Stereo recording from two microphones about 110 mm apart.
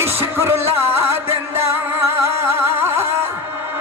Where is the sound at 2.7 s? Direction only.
20° right (ahead or behind).